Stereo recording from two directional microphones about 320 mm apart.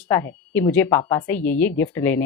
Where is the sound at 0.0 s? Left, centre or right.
Centre.